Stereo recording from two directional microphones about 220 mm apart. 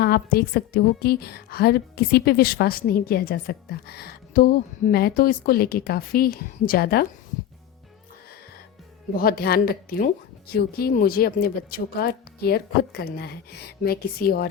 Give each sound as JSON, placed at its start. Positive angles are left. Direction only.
{"t": 0.0, "sound": "a woman's voice", "side_deg": 45}
{"t": 9.1, "sound": "a woman's voice", "side_deg": 40}